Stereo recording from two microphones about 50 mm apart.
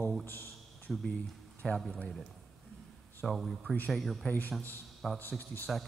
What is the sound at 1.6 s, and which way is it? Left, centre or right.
Speech, centre.